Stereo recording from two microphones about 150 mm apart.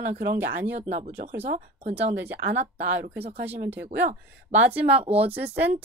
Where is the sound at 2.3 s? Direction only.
90° right.